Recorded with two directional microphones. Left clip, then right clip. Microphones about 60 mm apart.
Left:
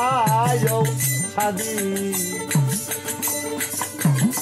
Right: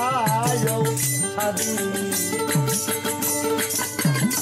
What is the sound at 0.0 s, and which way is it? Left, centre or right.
Music, right.